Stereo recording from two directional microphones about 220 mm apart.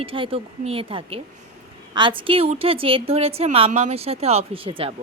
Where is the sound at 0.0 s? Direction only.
25° right (ahead or behind).